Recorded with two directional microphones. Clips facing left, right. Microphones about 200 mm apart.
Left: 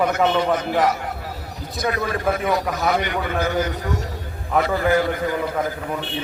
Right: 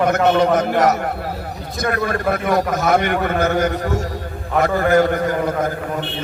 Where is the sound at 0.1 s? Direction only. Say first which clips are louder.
Right 4 dB; 45° right (ahead or behind).